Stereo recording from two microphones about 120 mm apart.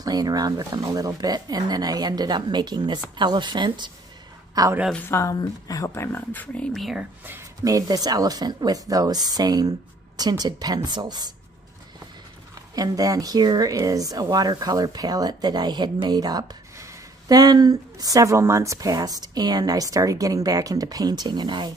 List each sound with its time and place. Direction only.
0.0 s speech: 35° right (ahead or behind)
4.9 s speech: 20° left (ahead or behind)
5.3 s speech: 35° left (ahead or behind); by 7.1 s centre (ahead or behind)
7.2 s speech: 25° right (ahead or behind)
12.5 s speech: 30° right (ahead or behind)